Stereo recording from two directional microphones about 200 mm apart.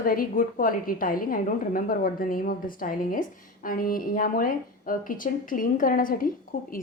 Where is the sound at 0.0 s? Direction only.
45° left (ahead or behind).